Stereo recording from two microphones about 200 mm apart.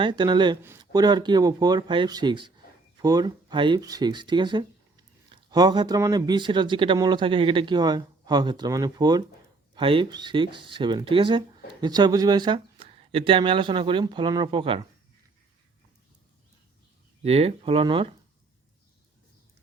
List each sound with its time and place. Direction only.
0.0 s speech: 20° right (ahead or behind)
17.2 s speech: 30° right (ahead or behind)